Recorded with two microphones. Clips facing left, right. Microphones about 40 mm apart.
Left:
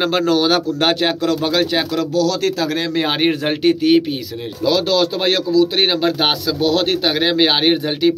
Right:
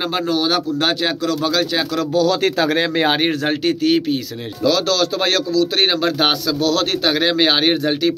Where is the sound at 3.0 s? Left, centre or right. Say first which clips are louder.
Left 1 dB; centre.